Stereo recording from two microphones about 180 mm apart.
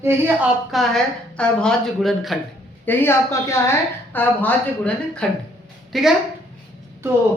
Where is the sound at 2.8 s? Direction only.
10° left (ahead or behind).